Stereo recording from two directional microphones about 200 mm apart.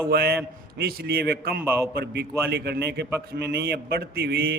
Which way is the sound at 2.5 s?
55° right (ahead or behind).